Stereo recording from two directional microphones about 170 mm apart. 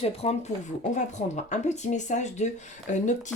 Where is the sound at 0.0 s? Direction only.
35° left (ahead or behind).